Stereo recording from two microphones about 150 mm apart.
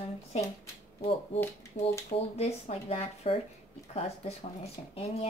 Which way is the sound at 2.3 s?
45° left (ahead or behind).